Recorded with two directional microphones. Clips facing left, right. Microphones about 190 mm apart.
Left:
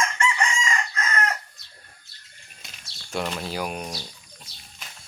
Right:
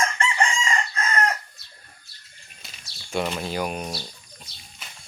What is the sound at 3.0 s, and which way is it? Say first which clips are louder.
Speech: right 2 dB; 5° right (ahead or behind).